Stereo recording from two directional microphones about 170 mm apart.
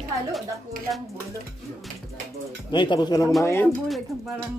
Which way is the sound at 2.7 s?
25° left (ahead or behind).